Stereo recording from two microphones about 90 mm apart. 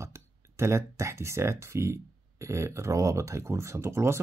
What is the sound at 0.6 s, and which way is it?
Speech, 30° right (ahead or behind).